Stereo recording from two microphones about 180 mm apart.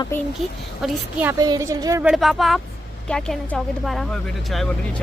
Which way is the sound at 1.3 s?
20° right (ahead or behind).